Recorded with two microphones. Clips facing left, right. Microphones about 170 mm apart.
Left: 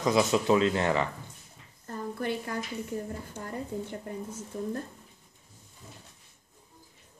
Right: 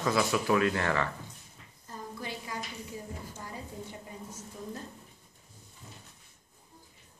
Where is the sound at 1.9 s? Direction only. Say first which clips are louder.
Left 8 dB; 60° left (ahead or behind).